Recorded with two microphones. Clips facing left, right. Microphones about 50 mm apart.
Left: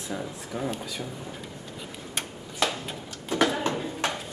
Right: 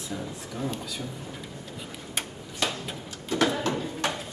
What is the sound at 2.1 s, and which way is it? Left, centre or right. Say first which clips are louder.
Tick-tock: even; centre.